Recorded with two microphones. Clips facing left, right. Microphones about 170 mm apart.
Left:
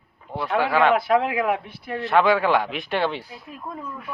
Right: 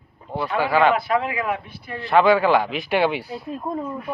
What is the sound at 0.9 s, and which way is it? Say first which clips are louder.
Speech: left 2 dB; 70° left (ahead or behind).